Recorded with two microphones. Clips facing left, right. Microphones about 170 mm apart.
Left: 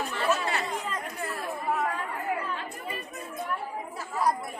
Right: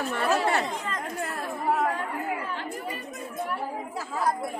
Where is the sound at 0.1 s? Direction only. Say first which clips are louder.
Right 5 dB; 60° right (ahead or behind).